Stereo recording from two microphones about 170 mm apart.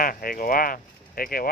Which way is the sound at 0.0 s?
55° left (ahead or behind).